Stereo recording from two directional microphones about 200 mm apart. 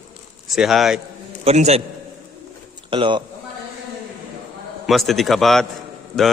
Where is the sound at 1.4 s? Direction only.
35° right (ahead or behind).